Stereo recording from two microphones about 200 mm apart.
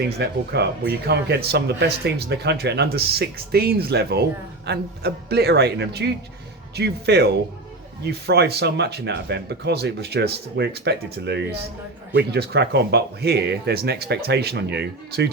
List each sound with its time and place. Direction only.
0.0 s speech: 55° right (ahead or behind)